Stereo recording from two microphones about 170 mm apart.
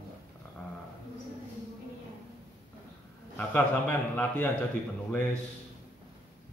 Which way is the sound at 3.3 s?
10° left (ahead or behind).